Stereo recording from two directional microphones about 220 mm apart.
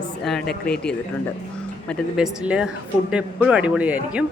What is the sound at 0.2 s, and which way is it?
Speech, centre (ahead or behind).